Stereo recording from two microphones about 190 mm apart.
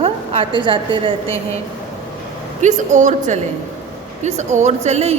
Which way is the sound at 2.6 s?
40° right (ahead or behind).